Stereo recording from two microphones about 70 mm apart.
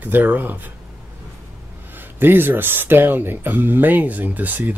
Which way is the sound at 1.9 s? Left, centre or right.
Right.